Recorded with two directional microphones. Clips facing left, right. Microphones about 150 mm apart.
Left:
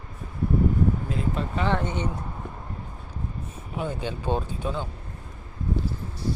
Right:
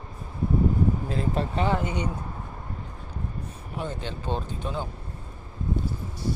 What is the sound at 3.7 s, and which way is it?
Speech, 10° left (ahead or behind).